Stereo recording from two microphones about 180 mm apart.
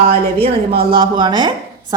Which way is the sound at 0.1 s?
60° right (ahead or behind).